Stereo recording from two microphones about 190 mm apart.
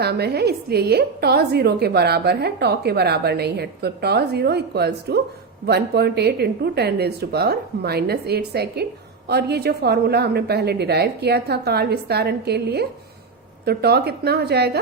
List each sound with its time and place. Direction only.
0.0 s speech: 60° right (ahead or behind)